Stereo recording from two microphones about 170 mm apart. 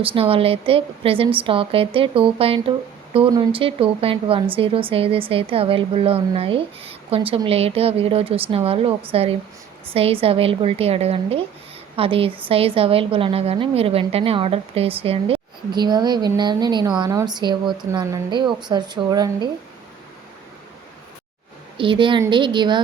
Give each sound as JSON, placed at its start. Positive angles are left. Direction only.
{"t": 0.0, "sound": "a woman's voice", "side_deg": -35}
{"t": 21.8, "sound": "a woman's voice", "side_deg": -30}